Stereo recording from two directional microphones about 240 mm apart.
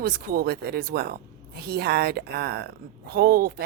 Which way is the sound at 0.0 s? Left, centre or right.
Right.